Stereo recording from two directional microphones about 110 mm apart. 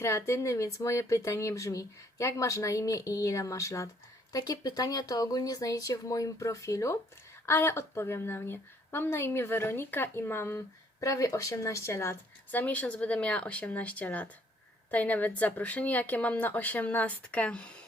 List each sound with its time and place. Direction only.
0.0 s speech: 25° left (ahead or behind)
12.5 s speech: 15° left (ahead or behind)